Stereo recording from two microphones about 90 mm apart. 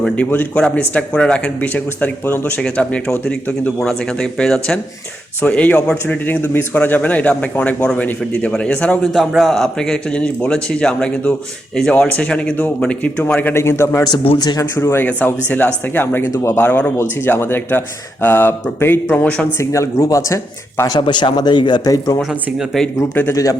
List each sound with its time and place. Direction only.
0.2 s a man's voice: 15° left (ahead or behind)
9.1 s a man's voice: centre (ahead or behind); by 13.6 s 20° left (ahead or behind)
13.6 s speech: 30° left (ahead or behind)
14.3 s speech: 50° left (ahead or behind)
14.6 s speech: 30° left (ahead or behind)
15.0 s speech: 20° left (ahead or behind)
16.3 s a man's voice: 30° left (ahead or behind); by 19.5 s 15° left (ahead or behind)
19.5 s speech: 35° left (ahead or behind)
20.9 s speech: 55° left (ahead or behind); by 22.2 s 40° left (ahead or behind)
22.2 s speech: 5° right (ahead or behind)
23.3 s speech: 40° left (ahead or behind)